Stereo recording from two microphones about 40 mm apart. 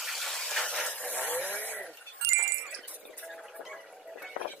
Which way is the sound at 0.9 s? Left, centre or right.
Left.